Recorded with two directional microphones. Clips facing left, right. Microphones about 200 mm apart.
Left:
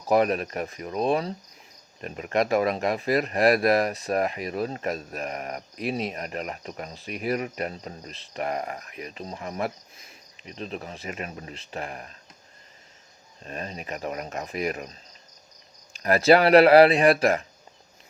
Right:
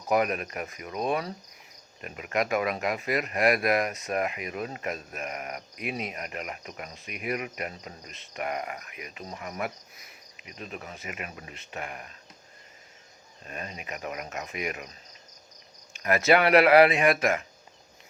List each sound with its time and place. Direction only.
0.1 s speech: 35° left (ahead or behind)
13.4 s speech: 35° left (ahead or behind)